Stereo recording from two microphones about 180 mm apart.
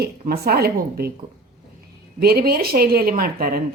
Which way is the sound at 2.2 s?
55° right (ahead or behind).